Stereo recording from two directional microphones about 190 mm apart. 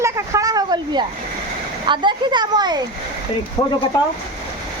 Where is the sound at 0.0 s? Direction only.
15° right (ahead or behind).